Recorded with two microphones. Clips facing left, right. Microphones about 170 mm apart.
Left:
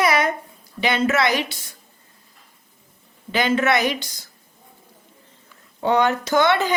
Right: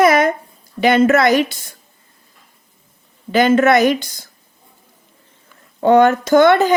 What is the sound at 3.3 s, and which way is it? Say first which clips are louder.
Speech: right 7 dB; 45° right (ahead or behind).